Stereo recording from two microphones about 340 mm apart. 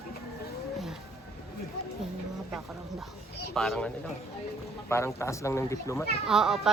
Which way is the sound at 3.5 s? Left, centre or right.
Centre.